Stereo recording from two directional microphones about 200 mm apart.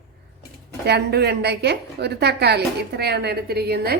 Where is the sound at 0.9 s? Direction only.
55° right (ahead or behind).